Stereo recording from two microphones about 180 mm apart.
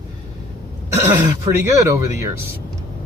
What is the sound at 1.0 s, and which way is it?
Speech, 15° right (ahead or behind).